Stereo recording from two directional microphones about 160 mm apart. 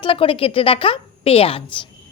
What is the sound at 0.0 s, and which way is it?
A woman's voice, 35° left (ahead or behind).